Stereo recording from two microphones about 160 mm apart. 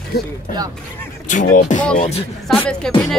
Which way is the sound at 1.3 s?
55° left (ahead or behind).